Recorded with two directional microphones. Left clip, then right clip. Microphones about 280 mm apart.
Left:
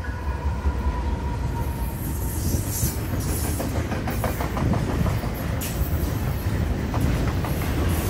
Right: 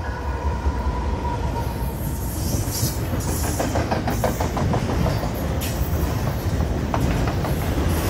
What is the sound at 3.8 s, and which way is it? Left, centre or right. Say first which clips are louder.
Train: right 5 dB; right.